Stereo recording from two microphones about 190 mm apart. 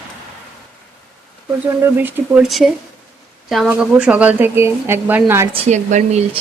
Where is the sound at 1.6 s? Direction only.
10° right (ahead or behind).